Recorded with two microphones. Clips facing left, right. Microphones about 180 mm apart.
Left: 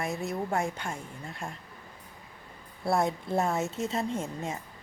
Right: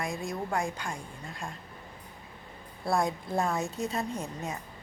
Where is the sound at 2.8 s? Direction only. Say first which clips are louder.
Left 1 dB; 25° left (ahead or behind).